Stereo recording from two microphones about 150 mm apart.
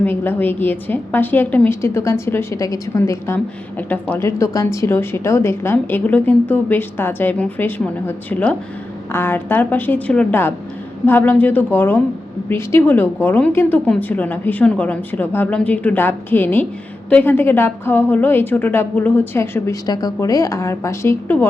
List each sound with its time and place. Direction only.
0.0 s a woman's voice: 15° left (ahead or behind)